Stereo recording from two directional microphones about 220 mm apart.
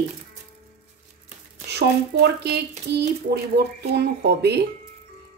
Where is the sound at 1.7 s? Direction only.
50° right (ahead or behind).